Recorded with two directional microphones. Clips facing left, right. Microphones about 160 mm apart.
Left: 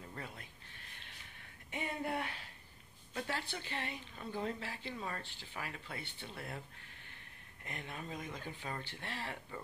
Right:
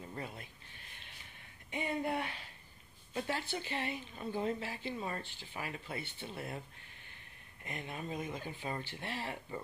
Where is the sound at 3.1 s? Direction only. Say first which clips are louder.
Right 3 dB; 20° right (ahead or behind).